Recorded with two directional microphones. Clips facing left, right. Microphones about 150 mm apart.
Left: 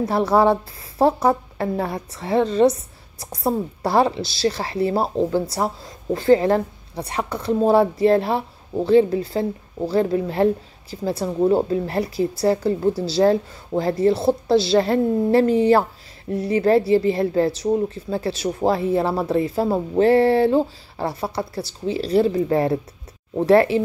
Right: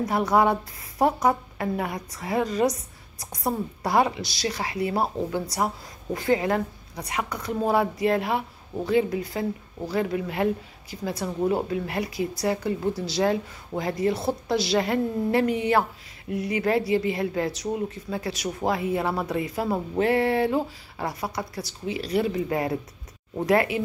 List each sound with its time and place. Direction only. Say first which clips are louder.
0.0 s speech: left 4 dB; 30° left (ahead or behind)